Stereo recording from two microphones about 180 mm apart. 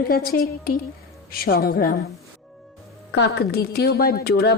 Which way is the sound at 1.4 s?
55° left (ahead or behind).